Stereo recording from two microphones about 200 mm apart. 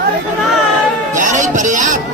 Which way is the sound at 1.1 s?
40° right (ahead or behind).